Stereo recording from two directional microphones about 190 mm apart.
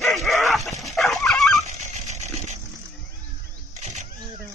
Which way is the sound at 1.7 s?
35° right (ahead or behind).